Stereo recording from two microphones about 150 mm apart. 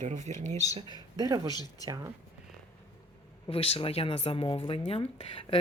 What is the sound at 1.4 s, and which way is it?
Speech, 25° left (ahead or behind).